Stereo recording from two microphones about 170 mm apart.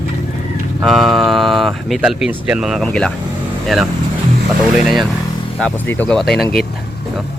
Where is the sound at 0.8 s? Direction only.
Centre (ahead or behind).